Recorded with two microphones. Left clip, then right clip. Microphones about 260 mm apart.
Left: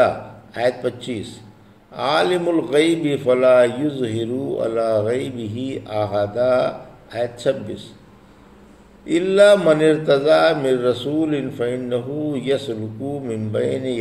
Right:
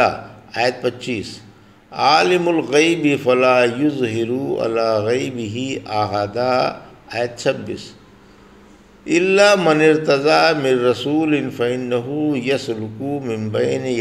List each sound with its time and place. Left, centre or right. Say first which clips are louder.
0.0 s a sound: even; right
1.9 s a man's voice: right 4 dB; centre
9.0 s a man's voice: even; right